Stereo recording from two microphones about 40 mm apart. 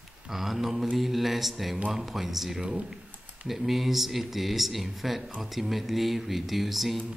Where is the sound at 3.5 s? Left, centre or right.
Centre.